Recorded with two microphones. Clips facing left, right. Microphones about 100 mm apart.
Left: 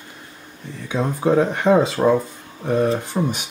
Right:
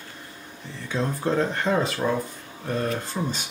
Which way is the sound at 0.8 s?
15° left (ahead or behind).